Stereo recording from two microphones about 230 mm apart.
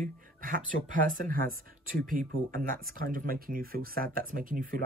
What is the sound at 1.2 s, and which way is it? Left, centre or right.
Speech, right.